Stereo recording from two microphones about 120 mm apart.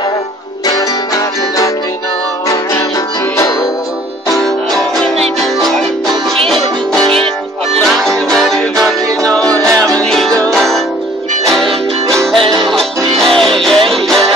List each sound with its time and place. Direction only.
0.7 s music: 30° left (ahead or behind)
4.3 s music: centre (ahead or behind)